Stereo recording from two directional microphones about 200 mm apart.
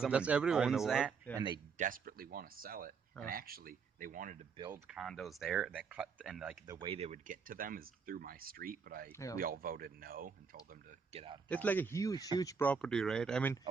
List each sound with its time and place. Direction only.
0.0 s speech: 5° right (ahead or behind)
1.8 s speech: 45° right (ahead or behind)
4.5 s speech: 20° right (ahead or behind)
4.9 s speech: centre (ahead or behind)
6.7 s speech: 25° right (ahead or behind); by 9.1 s 45° right (ahead or behind)
9.1 s speech: 15° left (ahead or behind)
9.4 s speech: 45° right (ahead or behind)
11.4 s speech: 10° left (ahead or behind)